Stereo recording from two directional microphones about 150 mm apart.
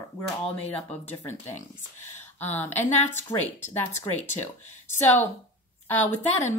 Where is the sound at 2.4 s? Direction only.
15° left (ahead or behind).